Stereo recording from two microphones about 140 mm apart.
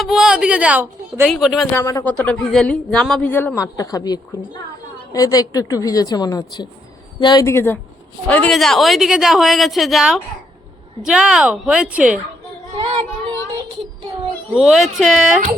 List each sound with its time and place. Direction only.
0.0 s a woman's voice: 5° right (ahead or behind)
1.7 s a woman's voice: 20° left (ahead or behind)
2.0 s a woman's voice: 10° left (ahead or behind); by 7.4 s 30° left (ahead or behind)
7.4 s a woman's voice: 15° left (ahead or behind); by 12.2 s 10° right (ahead or behind)
14.5 s a woman's voice: 5° right (ahead or behind)